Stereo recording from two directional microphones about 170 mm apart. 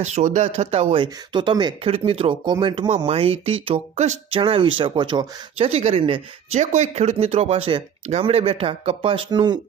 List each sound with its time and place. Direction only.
0.0 s speech: 45° right (ahead or behind)
4.4 s speech: 30° right (ahead or behind)